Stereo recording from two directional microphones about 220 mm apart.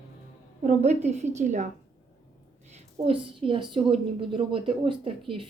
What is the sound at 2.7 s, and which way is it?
A woman's voice, 25° right (ahead or behind).